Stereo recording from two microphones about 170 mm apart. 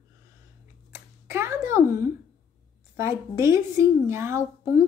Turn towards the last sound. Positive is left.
turn(degrees=-15)  # may be behind; listen again after turning